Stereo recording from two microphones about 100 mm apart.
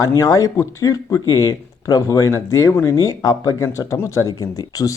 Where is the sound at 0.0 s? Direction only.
35° left (ahead or behind).